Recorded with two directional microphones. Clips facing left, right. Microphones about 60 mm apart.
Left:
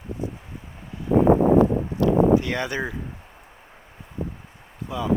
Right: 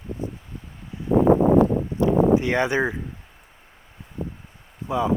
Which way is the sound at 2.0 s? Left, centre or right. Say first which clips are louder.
Even; right.